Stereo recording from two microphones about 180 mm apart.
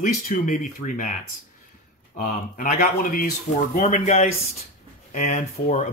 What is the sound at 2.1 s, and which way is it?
Speech, 50° left (ahead or behind).